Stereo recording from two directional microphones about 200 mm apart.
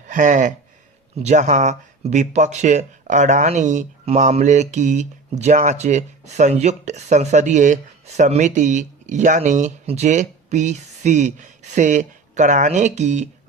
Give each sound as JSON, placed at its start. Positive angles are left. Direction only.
{"t": 0.1, "sound": "speech", "side_deg": -40}